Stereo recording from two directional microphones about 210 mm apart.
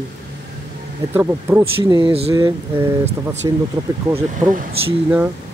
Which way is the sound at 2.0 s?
30° right (ahead or behind).